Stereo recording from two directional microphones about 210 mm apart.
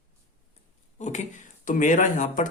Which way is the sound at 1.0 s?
35° left (ahead or behind).